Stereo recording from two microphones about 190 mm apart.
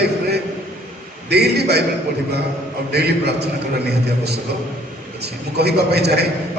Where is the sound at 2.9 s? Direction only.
60° right (ahead or behind).